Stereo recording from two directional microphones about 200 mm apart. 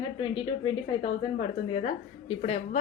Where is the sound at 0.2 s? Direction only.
25° left (ahead or behind).